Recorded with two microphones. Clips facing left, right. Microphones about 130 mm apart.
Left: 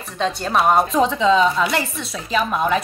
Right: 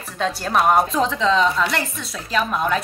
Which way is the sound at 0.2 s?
Centre (ahead or behind).